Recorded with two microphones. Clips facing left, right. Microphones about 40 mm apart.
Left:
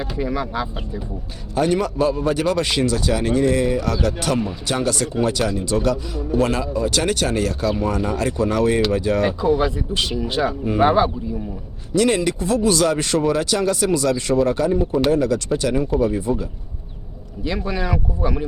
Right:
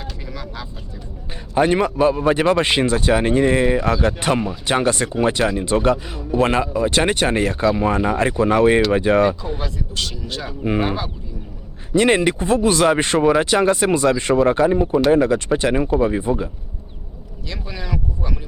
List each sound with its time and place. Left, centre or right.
0.0 s speech: centre
1.5 s speech: right
9.6 s speech: centre
11.9 s speech: right
17.4 s speech: centre